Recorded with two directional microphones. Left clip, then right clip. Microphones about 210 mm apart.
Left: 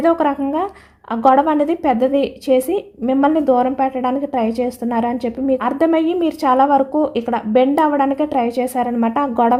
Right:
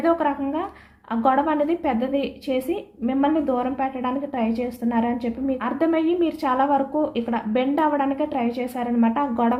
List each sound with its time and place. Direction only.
0.0 s a woman's voice: 50° left (ahead or behind)